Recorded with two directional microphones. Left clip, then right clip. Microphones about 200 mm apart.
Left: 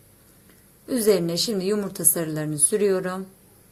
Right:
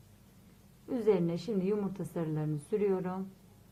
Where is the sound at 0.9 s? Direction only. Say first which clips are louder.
Left 9 dB; 20° left (ahead or behind).